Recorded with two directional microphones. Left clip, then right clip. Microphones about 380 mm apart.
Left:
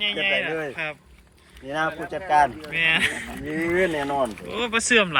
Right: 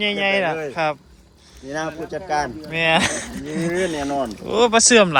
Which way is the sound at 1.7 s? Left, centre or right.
Left.